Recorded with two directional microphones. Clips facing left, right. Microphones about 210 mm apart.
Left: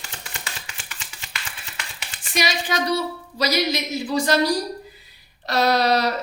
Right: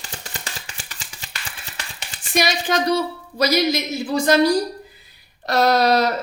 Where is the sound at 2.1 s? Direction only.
45° right (ahead or behind).